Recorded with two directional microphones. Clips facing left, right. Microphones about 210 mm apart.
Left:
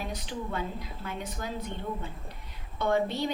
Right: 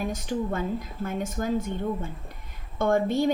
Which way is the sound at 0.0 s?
45° right (ahead or behind).